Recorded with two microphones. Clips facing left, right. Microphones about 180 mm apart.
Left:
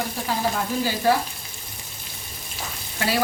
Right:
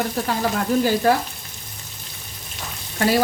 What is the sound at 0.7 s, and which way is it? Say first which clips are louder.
Frying: right 6 dB; 55° right (ahead or behind).